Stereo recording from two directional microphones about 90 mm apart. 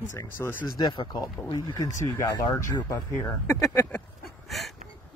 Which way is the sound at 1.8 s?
35° left (ahead or behind).